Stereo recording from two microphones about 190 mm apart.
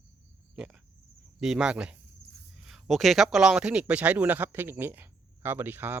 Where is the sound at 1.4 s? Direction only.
5° right (ahead or behind).